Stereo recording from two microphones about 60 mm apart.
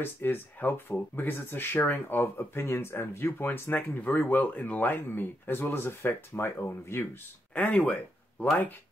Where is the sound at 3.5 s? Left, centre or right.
Left.